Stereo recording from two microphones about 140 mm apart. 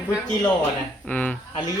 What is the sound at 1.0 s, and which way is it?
Speech, 10° left (ahead or behind).